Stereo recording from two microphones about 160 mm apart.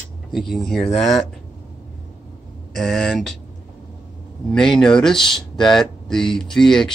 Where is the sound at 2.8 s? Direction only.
Centre (ahead or behind).